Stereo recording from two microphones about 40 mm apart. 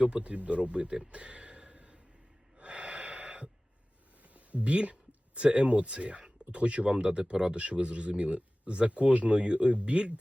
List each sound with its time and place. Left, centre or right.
0.0 s speech: right
2.6 s gasp: right
4.4 s speech: right